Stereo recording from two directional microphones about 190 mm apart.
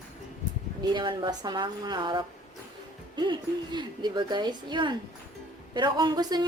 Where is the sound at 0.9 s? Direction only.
25° right (ahead or behind).